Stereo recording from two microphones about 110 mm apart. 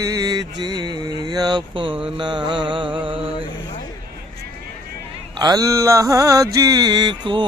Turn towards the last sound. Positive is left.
turn(degrees=-45)  # may be behind; listen again after turning